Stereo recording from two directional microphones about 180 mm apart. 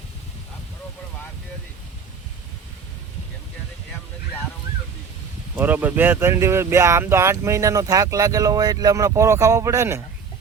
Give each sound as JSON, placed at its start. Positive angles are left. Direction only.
{"t": 5.5, "sound": "speech", "side_deg": -10}